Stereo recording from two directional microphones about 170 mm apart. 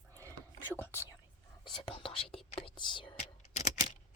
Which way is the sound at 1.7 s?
30° left (ahead or behind).